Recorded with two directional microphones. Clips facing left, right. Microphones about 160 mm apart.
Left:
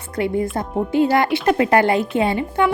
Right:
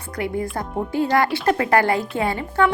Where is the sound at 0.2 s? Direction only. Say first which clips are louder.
Left 4 dB; 25° left (ahead or behind).